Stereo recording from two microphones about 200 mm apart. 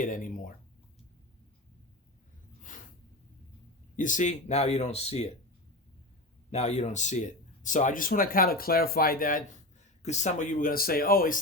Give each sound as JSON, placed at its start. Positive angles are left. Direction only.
{"t": 0.0, "sound": "speech", "side_deg": 40}
{"t": 3.9, "sound": "speech", "side_deg": 40}
{"t": 6.5, "sound": "speech", "side_deg": 35}